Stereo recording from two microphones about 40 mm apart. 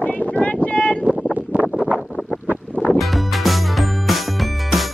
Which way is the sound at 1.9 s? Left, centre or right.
Centre.